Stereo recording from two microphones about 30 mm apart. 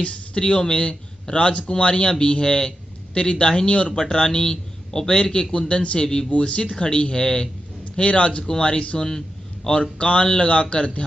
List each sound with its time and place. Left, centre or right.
0.0 s a man's voice: left
2.4 s speech: left
3.2 s a man's voice: left
3.9 s a man's voice: centre
5.5 s a man's voice: left
5.9 s speech: left
6.3 s a man's voice: left